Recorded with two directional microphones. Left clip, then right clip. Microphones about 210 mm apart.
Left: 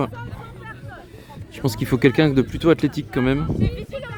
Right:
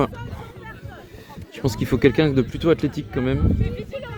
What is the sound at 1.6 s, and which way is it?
Speech, 5° left (ahead or behind).